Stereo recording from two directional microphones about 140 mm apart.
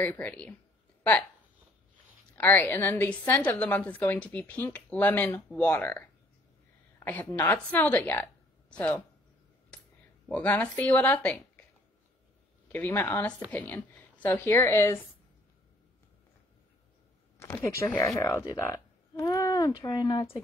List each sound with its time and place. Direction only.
0.0 s speech: 15° left (ahead or behind)
2.3 s a woman's voice: 10° left (ahead or behind)
10.2 s speech: 10° left (ahead or behind)
12.7 s speech: 15° left (ahead or behind)
17.4 s speech: 15° left (ahead or behind)